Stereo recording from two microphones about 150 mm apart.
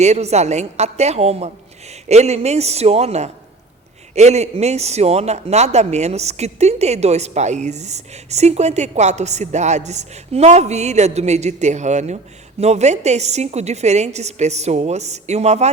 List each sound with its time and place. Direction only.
0.0 s a man's voice: 45° right (ahead or behind)